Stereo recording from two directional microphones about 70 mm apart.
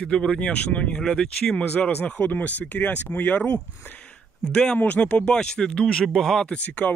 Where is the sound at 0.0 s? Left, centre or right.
Centre.